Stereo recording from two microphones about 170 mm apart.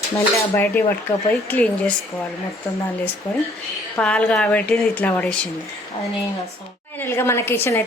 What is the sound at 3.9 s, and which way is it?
A woman's voice, 5° left (ahead or behind).